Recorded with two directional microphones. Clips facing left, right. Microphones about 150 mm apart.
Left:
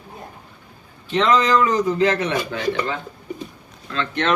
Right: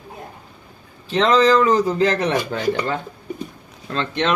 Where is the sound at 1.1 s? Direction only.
35° right (ahead or behind).